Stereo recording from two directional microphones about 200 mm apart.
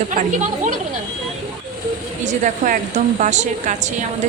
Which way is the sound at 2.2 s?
40° right (ahead or behind).